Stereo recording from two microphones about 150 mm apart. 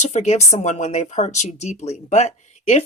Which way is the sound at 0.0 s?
50° left (ahead or behind).